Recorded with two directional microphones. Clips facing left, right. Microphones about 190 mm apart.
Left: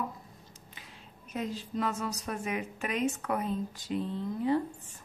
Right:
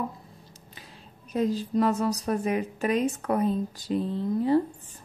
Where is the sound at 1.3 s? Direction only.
35° right (ahead or behind).